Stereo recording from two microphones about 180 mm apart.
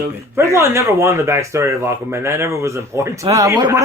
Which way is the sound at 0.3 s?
15° right (ahead or behind).